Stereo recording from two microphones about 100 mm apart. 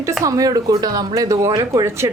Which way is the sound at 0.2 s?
35° right (ahead or behind).